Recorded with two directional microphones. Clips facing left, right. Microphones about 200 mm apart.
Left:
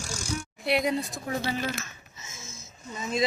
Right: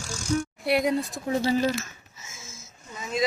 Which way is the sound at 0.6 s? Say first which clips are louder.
Right 1 dB; 5° right (ahead or behind).